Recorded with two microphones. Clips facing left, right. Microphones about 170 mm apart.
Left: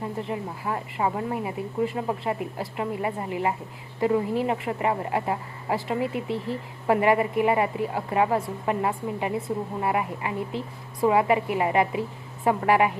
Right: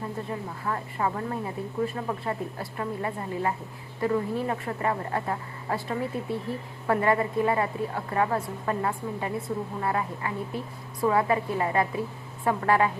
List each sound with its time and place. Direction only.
0.2 s speech: 20° left (ahead or behind)